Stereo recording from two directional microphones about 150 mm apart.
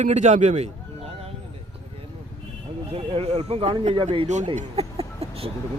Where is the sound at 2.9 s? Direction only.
45° right (ahead or behind).